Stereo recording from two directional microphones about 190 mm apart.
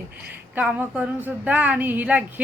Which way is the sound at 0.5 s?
10° right (ahead or behind).